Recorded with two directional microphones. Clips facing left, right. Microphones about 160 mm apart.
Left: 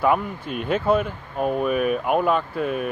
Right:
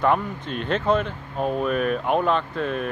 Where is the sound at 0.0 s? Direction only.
5° left (ahead or behind).